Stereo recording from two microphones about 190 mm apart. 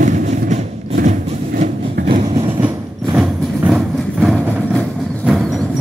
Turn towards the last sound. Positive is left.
turn(degrees=0)  # may be behind; listen again after turning